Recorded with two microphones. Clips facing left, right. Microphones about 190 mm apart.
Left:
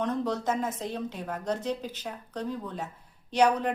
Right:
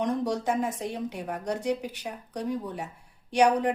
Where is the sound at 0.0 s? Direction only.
15° right (ahead or behind).